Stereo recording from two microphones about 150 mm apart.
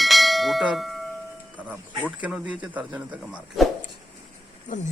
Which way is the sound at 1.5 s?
10° right (ahead or behind).